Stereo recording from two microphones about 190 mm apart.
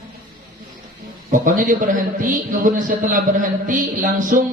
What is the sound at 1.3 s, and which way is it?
A man's voice, 45° right (ahead or behind).